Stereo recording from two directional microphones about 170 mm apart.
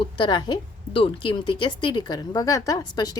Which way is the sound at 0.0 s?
30° left (ahead or behind).